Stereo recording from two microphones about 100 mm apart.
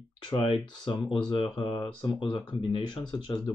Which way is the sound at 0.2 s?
55° left (ahead or behind).